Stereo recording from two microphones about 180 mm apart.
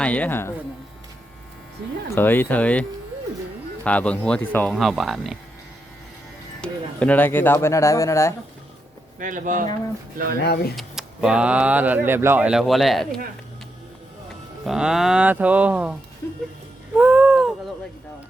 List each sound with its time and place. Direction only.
0.0 s speech: 10° left (ahead or behind)
2.0 s speech: 10° left (ahead or behind)
3.8 s speech: 5° left (ahead or behind)
4.7 s speech: centre (ahead or behind)
6.6 s speech: 5° left (ahead or behind)
9.1 s speech: 45° right (ahead or behind)
10.4 s speech: 65° left (ahead or behind)
10.8 s speech: 5° right (ahead or behind)
14.6 s speech: centre (ahead or behind)
17.0 s a sound: 10° right (ahead or behind)